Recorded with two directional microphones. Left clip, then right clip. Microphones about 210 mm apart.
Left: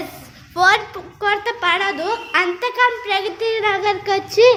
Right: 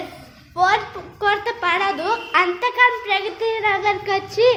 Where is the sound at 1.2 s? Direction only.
20° left (ahead or behind).